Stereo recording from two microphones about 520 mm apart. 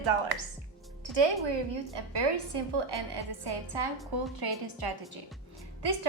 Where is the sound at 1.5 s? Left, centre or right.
Right.